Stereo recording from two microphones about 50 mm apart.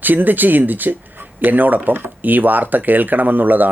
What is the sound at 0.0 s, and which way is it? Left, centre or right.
Speech, right.